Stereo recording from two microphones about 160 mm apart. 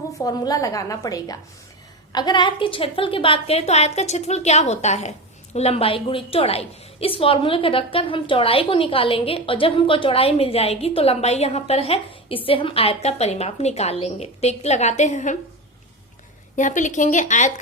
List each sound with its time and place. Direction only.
0.2 s a woman's voice: 25° left (ahead or behind); by 15.4 s 50° left (ahead or behind)
16.6 s a woman's voice: 50° left (ahead or behind)